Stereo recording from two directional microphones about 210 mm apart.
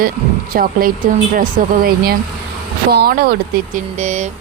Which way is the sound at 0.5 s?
45° right (ahead or behind).